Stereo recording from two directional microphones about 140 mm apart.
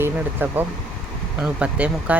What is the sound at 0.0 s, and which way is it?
Speech, 15° right (ahead or behind).